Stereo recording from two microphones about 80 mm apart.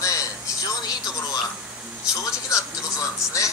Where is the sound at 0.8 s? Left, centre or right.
Left.